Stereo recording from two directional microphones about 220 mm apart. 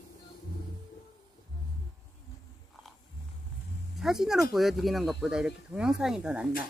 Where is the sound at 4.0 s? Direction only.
Centre (ahead or behind).